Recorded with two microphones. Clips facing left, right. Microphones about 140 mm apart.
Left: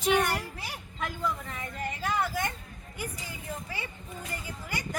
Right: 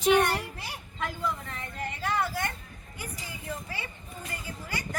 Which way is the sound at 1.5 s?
10° left (ahead or behind).